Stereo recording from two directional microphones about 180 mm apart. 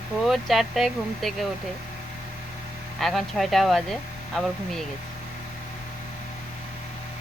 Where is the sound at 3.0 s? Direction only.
Centre (ahead or behind).